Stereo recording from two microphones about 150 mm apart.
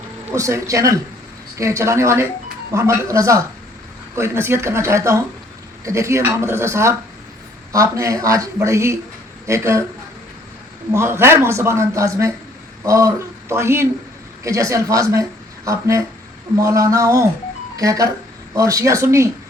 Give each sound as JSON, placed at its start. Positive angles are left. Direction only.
{"t": 0.3, "sound": "speech", "side_deg": -20}
{"t": 10.9, "sound": "speech", "side_deg": -15}